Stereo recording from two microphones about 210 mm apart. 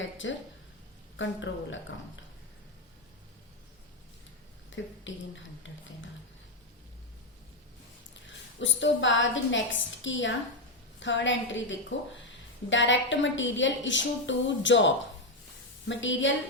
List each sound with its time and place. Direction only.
0.0 s a woman's voice: 65° left (ahead or behind)
4.7 s speech: 65° left (ahead or behind)
8.3 s a woman's voice: 60° left (ahead or behind)